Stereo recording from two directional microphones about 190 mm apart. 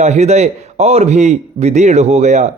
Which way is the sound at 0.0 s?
35° right (ahead or behind).